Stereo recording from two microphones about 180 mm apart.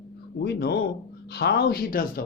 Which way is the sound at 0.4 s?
65° left (ahead or behind).